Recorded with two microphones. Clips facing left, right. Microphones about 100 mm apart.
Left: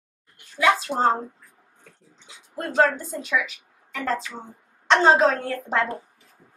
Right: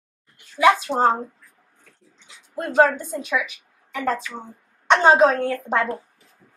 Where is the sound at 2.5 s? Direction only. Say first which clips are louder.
Right 3 dB; 15° right (ahead or behind).